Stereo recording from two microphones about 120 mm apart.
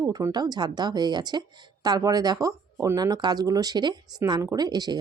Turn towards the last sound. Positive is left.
turn(degrees=-35)  # may be behind; listen again after turning